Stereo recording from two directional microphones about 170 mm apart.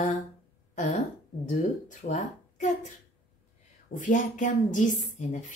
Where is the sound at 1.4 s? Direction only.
45° left (ahead or behind).